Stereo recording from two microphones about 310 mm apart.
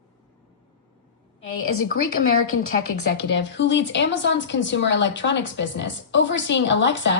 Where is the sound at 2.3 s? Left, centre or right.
Left.